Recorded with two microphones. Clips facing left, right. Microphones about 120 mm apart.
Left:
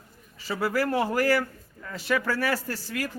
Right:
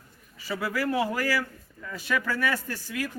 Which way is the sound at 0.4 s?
35° left (ahead or behind).